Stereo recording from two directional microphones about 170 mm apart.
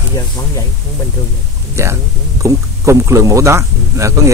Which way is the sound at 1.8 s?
15° right (ahead or behind).